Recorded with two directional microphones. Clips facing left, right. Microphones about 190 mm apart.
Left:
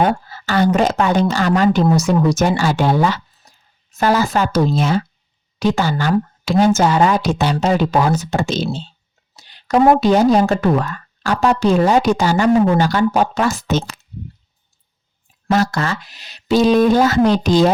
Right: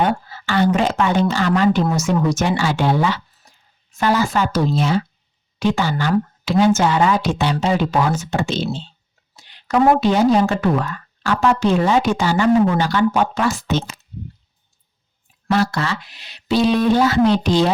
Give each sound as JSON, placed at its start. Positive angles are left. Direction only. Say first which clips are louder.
{"t": 0.0, "sound": "speech", "louder": "left 2 dB", "side_deg": 40}
{"t": 15.4, "sound": "speech", "louder": "left 2 dB", "side_deg": 45}